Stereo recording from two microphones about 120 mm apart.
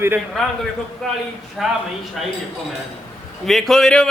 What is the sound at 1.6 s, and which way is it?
Speech, 5° right (ahead or behind).